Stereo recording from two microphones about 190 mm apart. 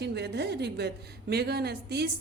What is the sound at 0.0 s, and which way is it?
A woman's voice, 60° right (ahead or behind).